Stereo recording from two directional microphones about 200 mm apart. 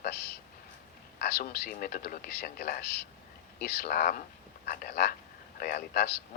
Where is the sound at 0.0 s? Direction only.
55° left (ahead or behind).